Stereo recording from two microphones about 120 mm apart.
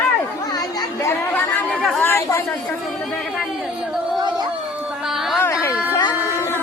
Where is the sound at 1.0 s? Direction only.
15° left (ahead or behind).